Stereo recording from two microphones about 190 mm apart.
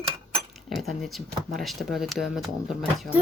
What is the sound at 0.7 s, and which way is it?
Speech, centre (ahead or behind).